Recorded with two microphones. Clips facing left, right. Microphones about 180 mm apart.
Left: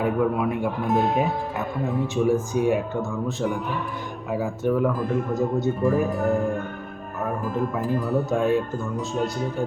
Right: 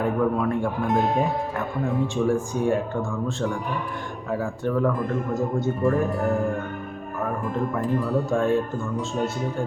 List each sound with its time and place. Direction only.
0.0 s speech: 10° left (ahead or behind)
4.3 s speech: 5° left (ahead or behind)
8.1 s speech: 20° left (ahead or behind)
8.4 s speech: centre (ahead or behind)